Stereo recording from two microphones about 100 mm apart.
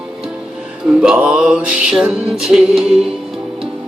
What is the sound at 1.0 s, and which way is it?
Music, 10° right (ahead or behind).